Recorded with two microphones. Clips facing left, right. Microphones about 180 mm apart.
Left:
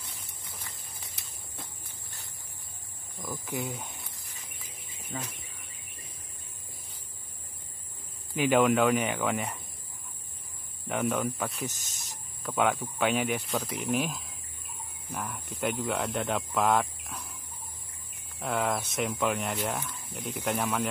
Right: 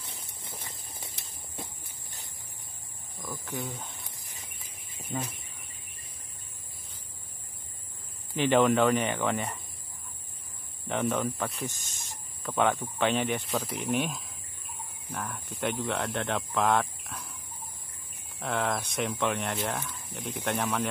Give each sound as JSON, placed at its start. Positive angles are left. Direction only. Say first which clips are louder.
{"t": 0.4, "sound": "walk", "louder": "right 3 dB", "side_deg": -25}
{"t": 3.2, "sound": "cricket", "louder": "left 2 dB", "side_deg": 10}
{"t": 8.4, "sound": "speech", "louder": "even", "side_deg": 5}
{"t": 10.9, "sound": "speech", "louder": "even", "side_deg": 0}
{"t": 18.4, "sound": "speech", "louder": "left 1 dB", "side_deg": 0}